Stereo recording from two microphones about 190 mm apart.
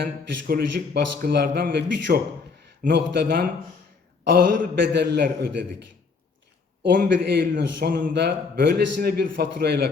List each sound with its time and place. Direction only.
0.0 s a man's voice: 55° right (ahead or behind)
6.8 s a man's voice: 60° right (ahead or behind)